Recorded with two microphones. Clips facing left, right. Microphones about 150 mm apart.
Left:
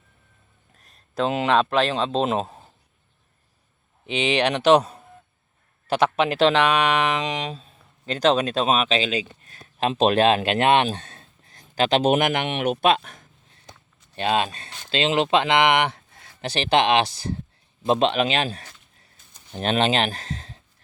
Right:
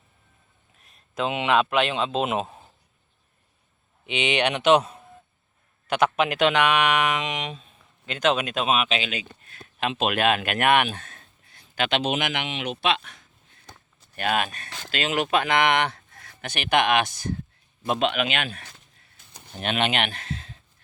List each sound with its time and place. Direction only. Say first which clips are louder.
0.8 s speech: left 3 dB; 40° left (ahead or behind)
4.0 s speech: left 2 dB; 35° left (ahead or behind)
14.2 s speech: left 3 dB; 25° left (ahead or behind)